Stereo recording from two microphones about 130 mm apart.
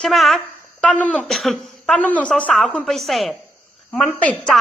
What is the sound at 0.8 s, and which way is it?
A woman's voice, 10° left (ahead or behind).